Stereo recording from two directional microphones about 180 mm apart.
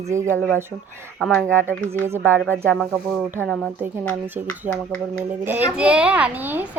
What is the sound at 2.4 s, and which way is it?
A child's voice, 5° left (ahead or behind).